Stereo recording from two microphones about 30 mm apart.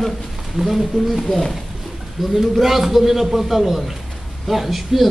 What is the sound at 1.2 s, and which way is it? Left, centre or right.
Speech, centre.